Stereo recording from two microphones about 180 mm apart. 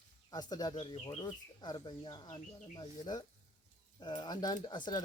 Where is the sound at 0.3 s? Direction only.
20° left (ahead or behind).